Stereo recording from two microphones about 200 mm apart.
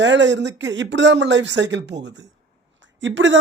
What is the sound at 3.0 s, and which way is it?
Speech, 65° right (ahead or behind).